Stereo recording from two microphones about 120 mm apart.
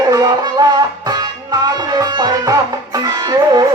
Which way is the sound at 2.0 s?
30° right (ahead or behind).